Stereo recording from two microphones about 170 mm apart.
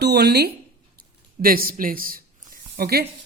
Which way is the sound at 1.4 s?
60° right (ahead or behind).